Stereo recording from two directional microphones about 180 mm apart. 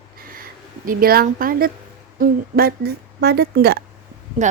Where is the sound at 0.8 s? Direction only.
55° right (ahead or behind).